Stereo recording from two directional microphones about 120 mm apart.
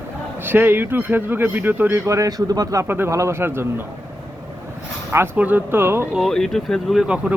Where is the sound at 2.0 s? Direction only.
25° right (ahead or behind).